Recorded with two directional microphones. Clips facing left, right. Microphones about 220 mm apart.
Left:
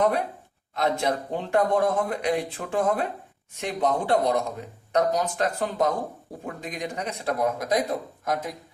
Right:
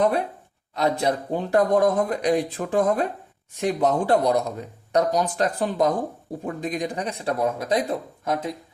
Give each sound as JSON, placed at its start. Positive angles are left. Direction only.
{"t": 0.8, "sound": "speech", "side_deg": -35}